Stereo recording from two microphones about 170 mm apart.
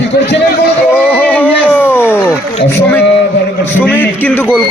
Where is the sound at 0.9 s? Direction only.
10° left (ahead or behind).